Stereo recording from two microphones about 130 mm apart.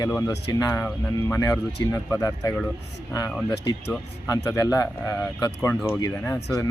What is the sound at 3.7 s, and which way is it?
Speech, 35° left (ahead or behind).